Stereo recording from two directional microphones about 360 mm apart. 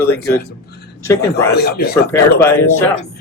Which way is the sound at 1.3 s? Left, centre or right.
Left.